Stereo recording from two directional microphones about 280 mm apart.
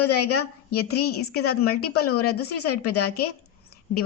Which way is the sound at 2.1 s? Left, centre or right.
Left.